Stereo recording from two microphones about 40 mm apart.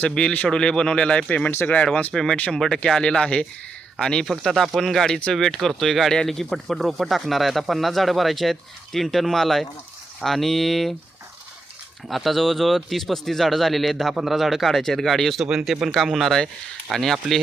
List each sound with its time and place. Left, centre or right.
0.2 s speech: left
1.6 s speech: left
2.1 s speech: centre
12.0 s speech: centre